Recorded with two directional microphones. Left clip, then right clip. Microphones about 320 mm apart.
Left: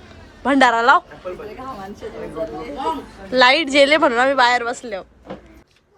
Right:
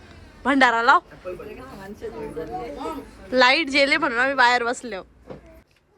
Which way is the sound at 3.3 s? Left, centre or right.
Centre.